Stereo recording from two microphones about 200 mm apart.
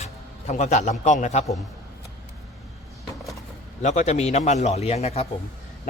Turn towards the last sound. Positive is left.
turn(degrees=30)  # may be behind; listen again after turning